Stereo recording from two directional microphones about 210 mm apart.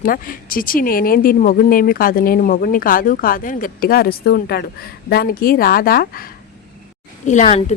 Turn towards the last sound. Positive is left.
turn(degrees=30)  # may be behind; listen again after turning